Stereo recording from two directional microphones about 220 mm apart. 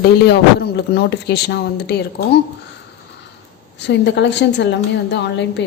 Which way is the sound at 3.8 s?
50° left (ahead or behind).